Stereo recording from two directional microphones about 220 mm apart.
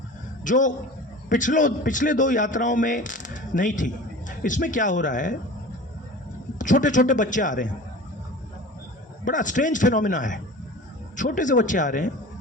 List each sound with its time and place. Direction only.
0.4 s a man's voice: 35° left (ahead or behind)
6.6 s a man's voice: 35° left (ahead or behind)
9.2 s a man's voice: 35° left (ahead or behind)